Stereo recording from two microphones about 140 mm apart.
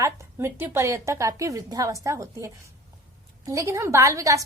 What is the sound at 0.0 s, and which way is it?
A woman's voice, 15° right (ahead or behind).